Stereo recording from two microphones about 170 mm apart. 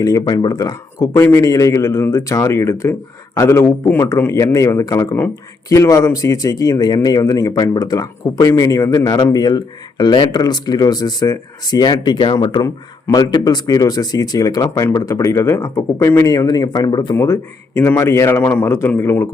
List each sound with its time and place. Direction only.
0.0 s a man's voice: 20° left (ahead or behind)